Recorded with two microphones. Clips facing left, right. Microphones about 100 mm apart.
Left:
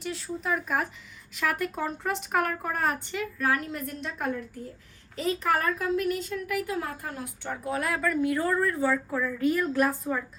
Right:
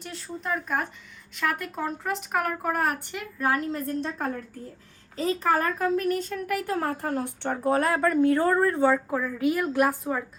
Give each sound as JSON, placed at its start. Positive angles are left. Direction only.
{"t": 0.0, "sound": "speech", "side_deg": 0}
{"t": 3.3, "sound": "a woman's voice", "side_deg": -25}
{"t": 7.4, "sound": "speech", "side_deg": -35}